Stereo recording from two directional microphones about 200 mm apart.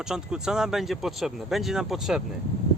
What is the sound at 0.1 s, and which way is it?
Speech, 5° right (ahead or behind).